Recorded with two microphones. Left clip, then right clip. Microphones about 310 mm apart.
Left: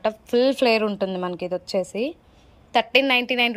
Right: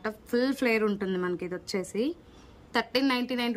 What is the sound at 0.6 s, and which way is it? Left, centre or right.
Speech, left.